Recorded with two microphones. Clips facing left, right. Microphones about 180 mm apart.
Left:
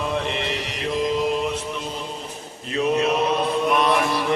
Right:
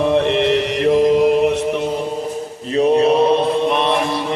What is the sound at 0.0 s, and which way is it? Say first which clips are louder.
Mantra: right 10 dB; 70° right (ahead or behind).